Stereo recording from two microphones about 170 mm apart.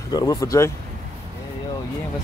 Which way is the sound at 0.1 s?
20° left (ahead or behind).